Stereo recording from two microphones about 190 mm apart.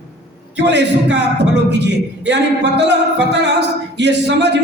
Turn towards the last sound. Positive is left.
turn(degrees=-65)  # may be behind; listen again after turning